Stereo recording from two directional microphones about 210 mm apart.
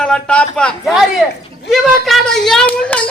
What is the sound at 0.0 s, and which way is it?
A woman's voice, 5° left (ahead or behind).